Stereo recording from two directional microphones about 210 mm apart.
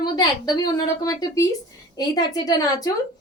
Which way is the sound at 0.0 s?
20° left (ahead or behind).